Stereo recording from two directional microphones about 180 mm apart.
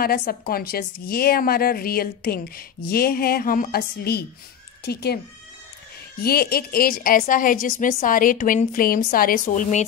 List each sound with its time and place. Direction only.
0.0 s a woman's voice: 55° left (ahead or behind)
6.2 s a woman's voice: 60° left (ahead or behind)